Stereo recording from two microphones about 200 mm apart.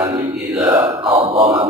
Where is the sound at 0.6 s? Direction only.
20° right (ahead or behind).